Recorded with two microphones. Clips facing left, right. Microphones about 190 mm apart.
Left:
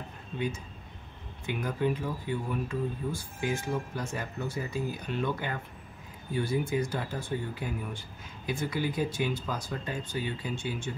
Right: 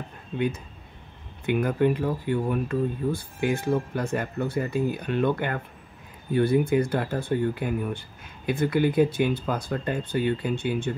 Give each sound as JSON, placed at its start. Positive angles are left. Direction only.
{"t": 1.4, "sound": "speech", "side_deg": -60}